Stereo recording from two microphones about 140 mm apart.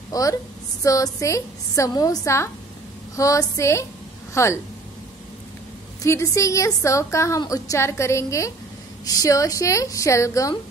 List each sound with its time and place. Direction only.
0.1 s a woman's voice: 25° left (ahead or behind)
6.0 s a woman's voice: 20° left (ahead or behind)